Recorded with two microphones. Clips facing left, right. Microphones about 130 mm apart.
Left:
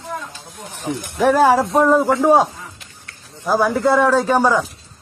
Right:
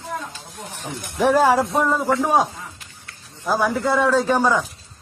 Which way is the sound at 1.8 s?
15° left (ahead or behind).